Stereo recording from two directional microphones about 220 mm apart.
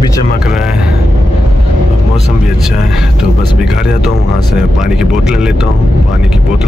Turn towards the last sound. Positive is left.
turn(degrees=-5)  # may be behind; listen again after turning